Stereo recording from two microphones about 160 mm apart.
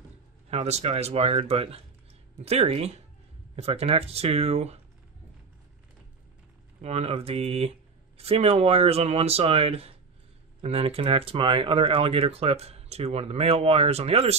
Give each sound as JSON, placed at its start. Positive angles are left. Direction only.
{"t": 0.5, "sound": "speech", "side_deg": -40}
{"t": 6.8, "sound": "speech", "side_deg": -40}